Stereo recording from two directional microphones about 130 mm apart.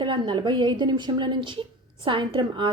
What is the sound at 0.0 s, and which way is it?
A woman's voice, 35° right (ahead or behind).